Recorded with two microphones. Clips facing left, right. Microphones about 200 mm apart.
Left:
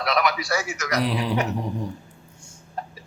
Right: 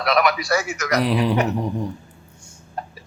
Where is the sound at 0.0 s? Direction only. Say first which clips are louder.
Right 4 dB; 60° right (ahead or behind).